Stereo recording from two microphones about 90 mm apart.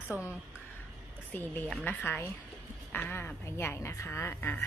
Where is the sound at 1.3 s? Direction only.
20° left (ahead or behind).